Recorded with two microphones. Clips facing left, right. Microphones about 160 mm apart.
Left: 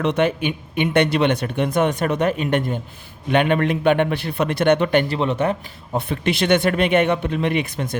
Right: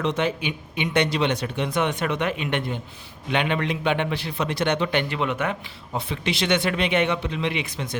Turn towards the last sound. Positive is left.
turn(degrees=50)  # may be behind; listen again after turning